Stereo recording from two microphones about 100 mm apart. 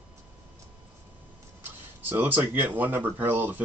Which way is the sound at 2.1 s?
20° right (ahead or behind).